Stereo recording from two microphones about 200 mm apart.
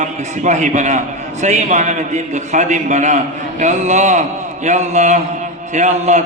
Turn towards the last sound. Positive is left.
turn(degrees=-35)  # may be behind; listen again after turning